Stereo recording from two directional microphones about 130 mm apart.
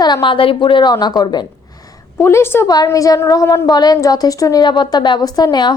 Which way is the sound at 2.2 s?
20° left (ahead or behind).